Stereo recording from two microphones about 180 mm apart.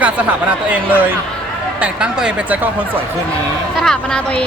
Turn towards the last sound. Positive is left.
turn(degrees=5)  # may be behind; listen again after turning